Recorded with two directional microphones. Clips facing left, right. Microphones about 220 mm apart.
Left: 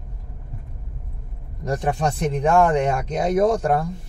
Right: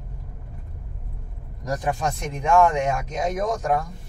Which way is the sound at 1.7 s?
30° left (ahead or behind).